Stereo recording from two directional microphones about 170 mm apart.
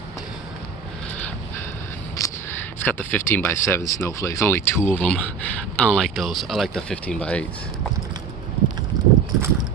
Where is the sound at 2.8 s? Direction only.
10° left (ahead or behind).